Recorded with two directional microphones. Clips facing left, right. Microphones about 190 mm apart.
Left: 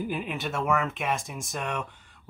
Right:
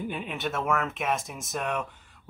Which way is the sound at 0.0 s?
5° left (ahead or behind).